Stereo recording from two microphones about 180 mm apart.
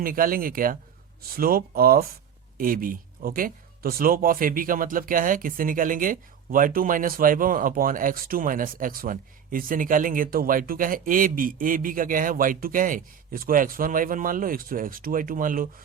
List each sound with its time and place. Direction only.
0.0 s speech: 50° right (ahead or behind)